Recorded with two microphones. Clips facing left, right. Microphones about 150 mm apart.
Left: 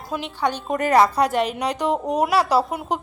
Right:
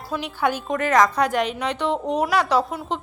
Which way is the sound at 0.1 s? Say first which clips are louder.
Right 1 dB; centre (ahead or behind).